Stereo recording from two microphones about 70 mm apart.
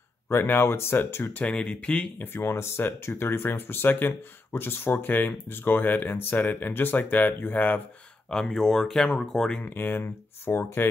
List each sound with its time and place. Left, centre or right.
0.3 s speech: left
1.4 s speech: centre
2.1 s speech: left
8.3 s speech: centre
9.8 s speech: left